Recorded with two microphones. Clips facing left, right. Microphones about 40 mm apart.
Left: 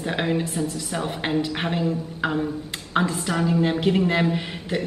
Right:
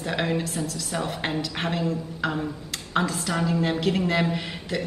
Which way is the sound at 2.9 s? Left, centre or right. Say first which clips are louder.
Left 2 dB; centre.